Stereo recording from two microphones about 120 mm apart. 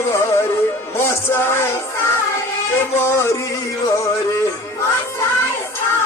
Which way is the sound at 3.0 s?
20° left (ahead or behind).